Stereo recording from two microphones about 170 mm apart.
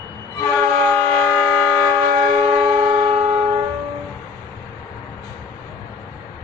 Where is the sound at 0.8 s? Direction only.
10° left (ahead or behind).